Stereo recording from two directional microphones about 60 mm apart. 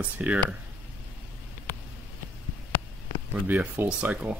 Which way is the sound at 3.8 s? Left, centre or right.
Right.